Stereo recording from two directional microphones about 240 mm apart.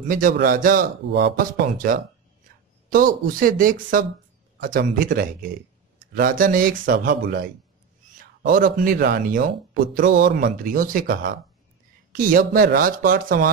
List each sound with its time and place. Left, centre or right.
0.1 s speech: right